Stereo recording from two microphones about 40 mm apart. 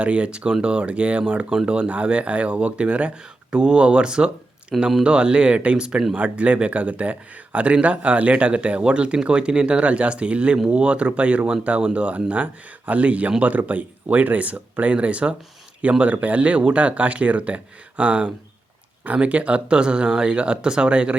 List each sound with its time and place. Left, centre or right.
0.0 s speech: right
4.7 s speech: centre
5.0 s speech: right